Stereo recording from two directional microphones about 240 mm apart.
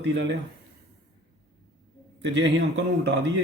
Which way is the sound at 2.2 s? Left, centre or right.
Right.